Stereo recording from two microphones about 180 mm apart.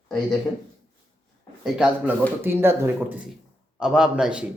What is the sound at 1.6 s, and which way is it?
A man's voice, 5° right (ahead or behind).